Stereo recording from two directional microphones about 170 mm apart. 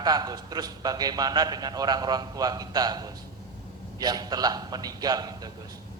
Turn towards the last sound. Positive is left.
turn(degrees=-25)  # may be behind; listen again after turning